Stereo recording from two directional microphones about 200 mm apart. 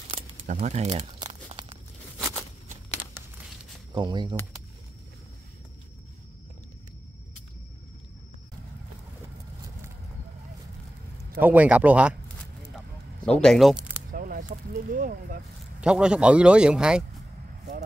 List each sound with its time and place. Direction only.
0.1 s crumpling: 35° right (ahead or behind)
3.2 s crumpling: 10° right (ahead or behind)
3.9 s speech: 20° right (ahead or behind)
11.3 s speech: 10° right (ahead or behind)
13.4 s speech: centre (ahead or behind)
14.1 s speech: 45° right (ahead or behind)
15.8 s speech: 5° right (ahead or behind)